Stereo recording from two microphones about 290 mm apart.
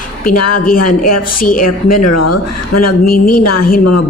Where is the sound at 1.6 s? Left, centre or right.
Left.